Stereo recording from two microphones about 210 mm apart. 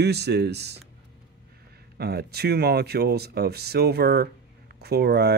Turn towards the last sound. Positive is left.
turn(degrees=-50)  # may be behind; listen again after turning